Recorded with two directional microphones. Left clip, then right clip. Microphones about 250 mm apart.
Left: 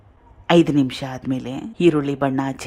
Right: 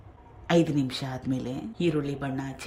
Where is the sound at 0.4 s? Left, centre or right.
Centre.